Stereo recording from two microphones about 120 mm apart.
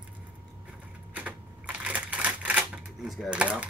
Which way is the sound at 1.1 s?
10° right (ahead or behind).